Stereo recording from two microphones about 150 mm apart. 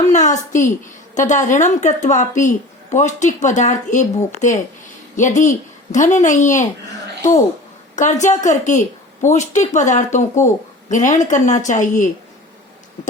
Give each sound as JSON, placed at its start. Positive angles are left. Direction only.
{"t": 0.1, "sound": "a woman's voice", "side_deg": 55}
{"t": 7.9, "sound": "speech", "side_deg": 55}